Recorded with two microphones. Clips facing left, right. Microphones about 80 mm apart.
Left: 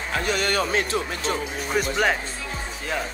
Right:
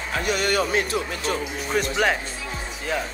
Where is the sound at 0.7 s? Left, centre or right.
Left.